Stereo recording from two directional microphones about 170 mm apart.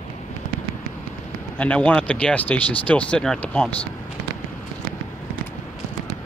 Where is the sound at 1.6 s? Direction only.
10° left (ahead or behind).